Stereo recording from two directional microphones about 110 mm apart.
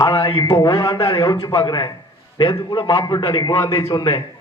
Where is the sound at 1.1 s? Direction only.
30° left (ahead or behind).